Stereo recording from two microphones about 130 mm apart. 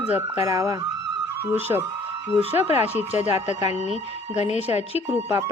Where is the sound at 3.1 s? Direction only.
60° left (ahead or behind).